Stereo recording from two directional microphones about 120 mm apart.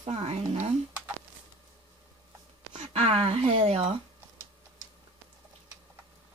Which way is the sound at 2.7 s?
60° right (ahead or behind).